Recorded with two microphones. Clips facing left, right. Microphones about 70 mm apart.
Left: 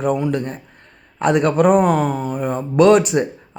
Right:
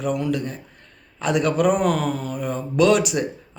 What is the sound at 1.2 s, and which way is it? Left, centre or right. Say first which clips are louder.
Speech: left 5 dB; left.